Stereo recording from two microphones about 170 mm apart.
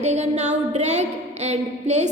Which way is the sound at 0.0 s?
40° right (ahead or behind).